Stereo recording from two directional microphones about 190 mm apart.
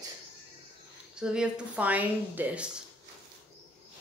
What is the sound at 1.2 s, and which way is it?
Speech, 5° right (ahead or behind).